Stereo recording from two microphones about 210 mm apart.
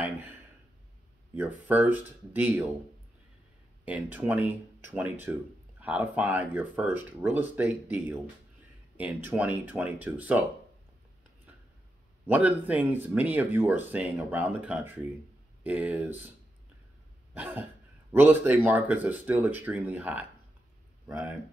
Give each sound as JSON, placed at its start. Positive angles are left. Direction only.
{"t": 0.0, "sound": "a sound", "side_deg": -10}
{"t": 1.3, "sound": "speech", "side_deg": -10}
{"t": 3.8, "sound": "speech", "side_deg": -5}
{"t": 12.3, "sound": "speech", "side_deg": -5}
{"t": 17.3, "sound": "cough", "side_deg": -10}
{"t": 18.1, "sound": "speech", "side_deg": -10}